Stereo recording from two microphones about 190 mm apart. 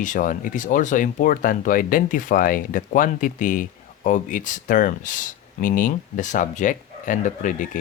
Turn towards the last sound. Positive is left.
turn(degrees=40)  # may be behind; listen again after turning